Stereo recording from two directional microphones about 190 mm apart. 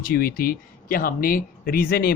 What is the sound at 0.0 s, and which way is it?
Speech, 50° left (ahead or behind).